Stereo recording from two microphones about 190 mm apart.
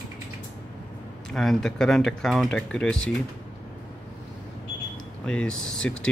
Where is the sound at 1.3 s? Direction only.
Centre (ahead or behind).